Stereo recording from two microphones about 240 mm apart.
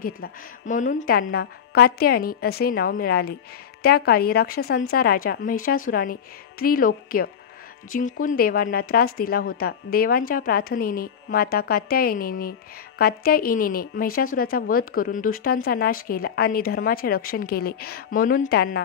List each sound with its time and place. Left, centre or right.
0.0 s speech: left